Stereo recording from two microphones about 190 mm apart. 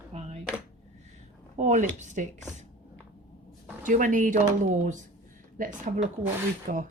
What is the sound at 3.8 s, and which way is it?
A woman's voice, 45° right (ahead or behind).